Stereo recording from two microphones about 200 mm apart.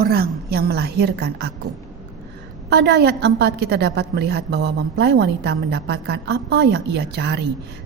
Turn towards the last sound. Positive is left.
turn(degrees=-60)  # may be behind; listen again after turning